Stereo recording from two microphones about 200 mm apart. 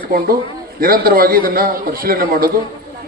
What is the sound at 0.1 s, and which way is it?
A man's voice, 45° right (ahead or behind).